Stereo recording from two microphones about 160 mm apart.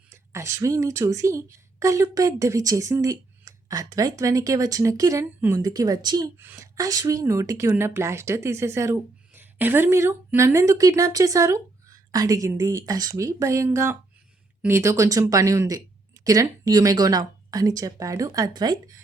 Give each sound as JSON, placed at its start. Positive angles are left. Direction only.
{"t": 0.1, "sound": "a woman's voice", "side_deg": -15}